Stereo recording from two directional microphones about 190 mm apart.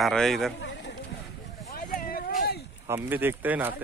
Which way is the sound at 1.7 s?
50° left (ahead or behind).